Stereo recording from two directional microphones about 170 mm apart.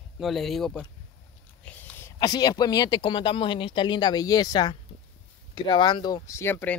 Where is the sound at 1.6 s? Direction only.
10° left (ahead or behind).